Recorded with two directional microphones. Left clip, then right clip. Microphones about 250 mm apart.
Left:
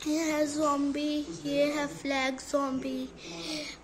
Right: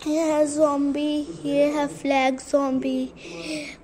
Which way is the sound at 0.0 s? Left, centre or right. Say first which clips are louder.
Right 8 dB; centre.